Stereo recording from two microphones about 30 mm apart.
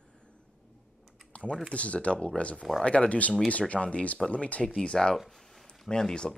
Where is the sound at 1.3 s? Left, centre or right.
Left.